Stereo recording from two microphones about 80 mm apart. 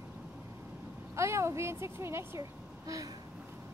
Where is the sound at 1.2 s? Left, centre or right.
Right.